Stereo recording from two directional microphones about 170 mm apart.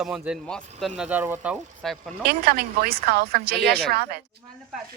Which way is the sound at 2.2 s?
65° right (ahead or behind).